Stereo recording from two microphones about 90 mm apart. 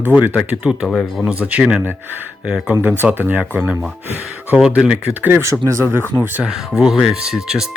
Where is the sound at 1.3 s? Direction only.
15° right (ahead or behind).